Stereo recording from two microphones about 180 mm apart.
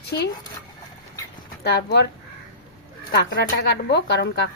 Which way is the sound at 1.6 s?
65° left (ahead or behind).